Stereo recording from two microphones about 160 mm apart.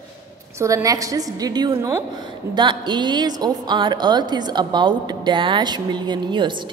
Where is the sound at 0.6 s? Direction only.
20° right (ahead or behind).